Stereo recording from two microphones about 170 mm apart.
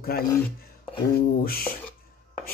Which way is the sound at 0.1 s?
65° left (ahead or behind).